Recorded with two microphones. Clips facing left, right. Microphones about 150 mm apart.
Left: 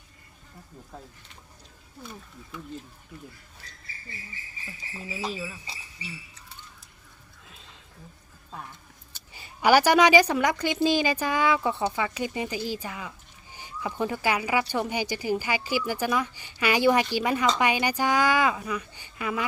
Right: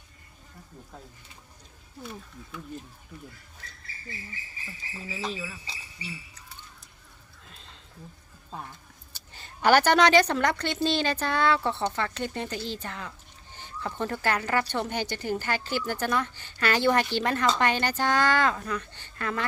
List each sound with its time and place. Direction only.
5.1 s speech: 5° left (ahead or behind)
7.4 s horse: centre (ahead or behind)
9.3 s a woman's voice: 10° left (ahead or behind)